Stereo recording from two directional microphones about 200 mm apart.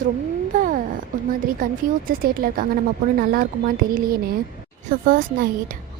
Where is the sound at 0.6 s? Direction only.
40° right (ahead or behind).